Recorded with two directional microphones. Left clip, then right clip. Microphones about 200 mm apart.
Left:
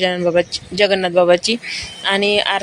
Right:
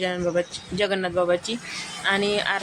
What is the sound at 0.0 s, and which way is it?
A woman's voice, 20° left (ahead or behind).